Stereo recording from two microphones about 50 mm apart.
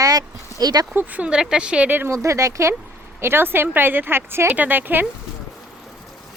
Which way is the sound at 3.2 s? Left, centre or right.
Right.